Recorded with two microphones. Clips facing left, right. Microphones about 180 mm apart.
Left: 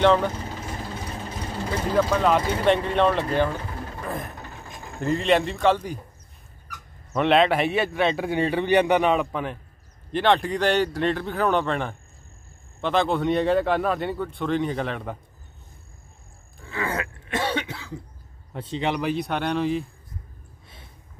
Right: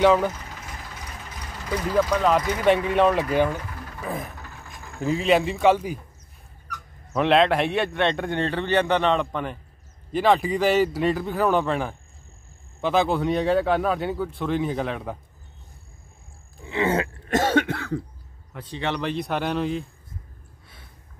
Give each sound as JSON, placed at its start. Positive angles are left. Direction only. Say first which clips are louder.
{"t": 0.0, "sound": "speech", "louder": "right 1 dB", "side_deg": -5}
{"t": 0.3, "sound": "vehicle", "louder": "left 6 dB", "side_deg": 30}
{"t": 2.6, "sound": "speech", "louder": "right 2 dB", "side_deg": -5}
{"t": 3.5, "sound": "pigeon", "louder": "left 2 dB", "side_deg": 30}
{"t": 4.0, "sound": "a sound", "louder": "right 2 dB", "side_deg": 0}
{"t": 4.4, "sound": "a sound", "louder": "left 3 dB", "side_deg": 20}
{"t": 5.0, "sound": "a man's voice", "louder": "right 1 dB", "side_deg": -5}
{"t": 7.2, "sound": "a man's voice", "louder": "even", "side_deg": 0}
{"t": 16.6, "sound": "groan", "louder": "right 6 dB", "side_deg": -20}
{"t": 17.3, "sound": "cough", "louder": "right 6 dB", "side_deg": -45}
{"t": 18.5, "sound": "a man's voice", "louder": "left 2 dB", "side_deg": 25}